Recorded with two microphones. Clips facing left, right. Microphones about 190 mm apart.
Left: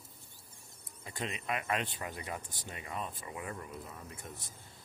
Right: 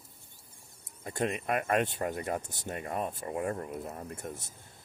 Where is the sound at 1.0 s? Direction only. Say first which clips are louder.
Right 7 dB; 50° right (ahead or behind).